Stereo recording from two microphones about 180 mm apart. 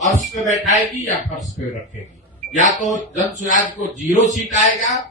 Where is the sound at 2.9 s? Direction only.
45° right (ahead or behind).